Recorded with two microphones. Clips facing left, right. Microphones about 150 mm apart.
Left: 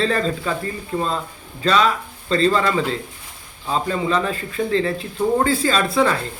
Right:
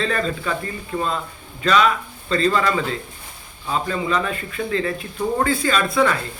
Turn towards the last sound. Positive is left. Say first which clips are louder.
# left 1 dB
turn(degrees=30)  # may be behind; listen again after turning